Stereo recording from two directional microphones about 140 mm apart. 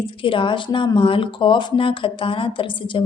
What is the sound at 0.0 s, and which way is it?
Speech, 40° left (ahead or behind).